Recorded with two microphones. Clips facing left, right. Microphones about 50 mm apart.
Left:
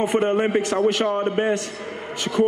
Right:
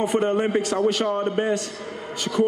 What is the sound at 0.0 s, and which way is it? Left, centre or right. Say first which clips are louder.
A man's voice: left 1 dB; left.